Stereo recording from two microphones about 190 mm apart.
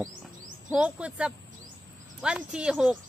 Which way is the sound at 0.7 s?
5° right (ahead or behind).